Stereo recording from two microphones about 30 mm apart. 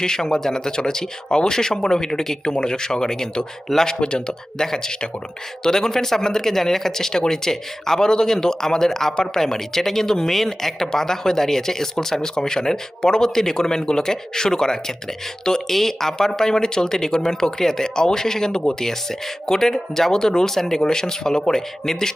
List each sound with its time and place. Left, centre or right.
0.0 s speech: left
2.4 s speech: left
3.7 s speech: centre
4.0 s speech: left
4.6 s speech: centre
15.7 s speech: centre